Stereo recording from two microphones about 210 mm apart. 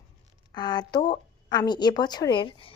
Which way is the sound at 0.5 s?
20° left (ahead or behind).